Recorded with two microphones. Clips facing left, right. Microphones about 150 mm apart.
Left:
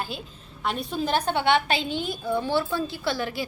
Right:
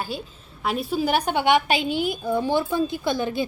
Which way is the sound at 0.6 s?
5° right (ahead or behind).